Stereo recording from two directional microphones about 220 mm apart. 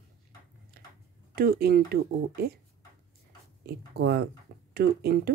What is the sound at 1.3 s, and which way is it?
Speech, 45° right (ahead or behind).